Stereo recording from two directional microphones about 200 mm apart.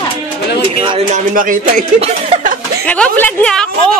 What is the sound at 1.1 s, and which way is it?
Speech, 40° right (ahead or behind).